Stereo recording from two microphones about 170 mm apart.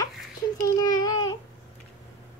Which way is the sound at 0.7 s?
25° left (ahead or behind).